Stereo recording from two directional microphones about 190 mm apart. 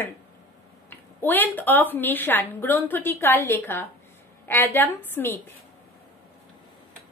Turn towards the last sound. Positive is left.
turn(degrees=10)  # may be behind; listen again after turning